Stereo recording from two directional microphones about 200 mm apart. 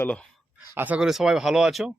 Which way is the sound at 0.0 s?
5° left (ahead or behind).